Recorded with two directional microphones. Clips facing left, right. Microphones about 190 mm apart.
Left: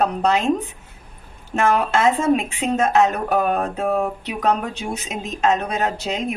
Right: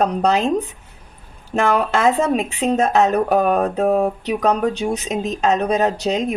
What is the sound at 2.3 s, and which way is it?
Speech, 40° right (ahead or behind).